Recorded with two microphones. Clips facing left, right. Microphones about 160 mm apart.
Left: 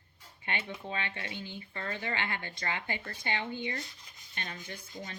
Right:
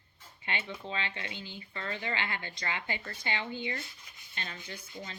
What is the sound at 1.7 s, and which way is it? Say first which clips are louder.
Rub: even; 45° left (ahead or behind).